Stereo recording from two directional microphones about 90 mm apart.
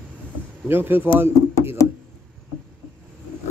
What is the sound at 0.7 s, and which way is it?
Speech, 25° right (ahead or behind).